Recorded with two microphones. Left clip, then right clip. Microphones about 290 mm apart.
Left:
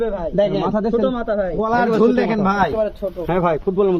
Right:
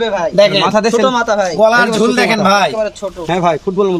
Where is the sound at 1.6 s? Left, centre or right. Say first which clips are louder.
Right 6 dB; right.